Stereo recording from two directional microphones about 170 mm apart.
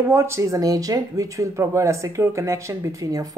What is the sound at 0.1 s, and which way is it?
Speech, 15° right (ahead or behind).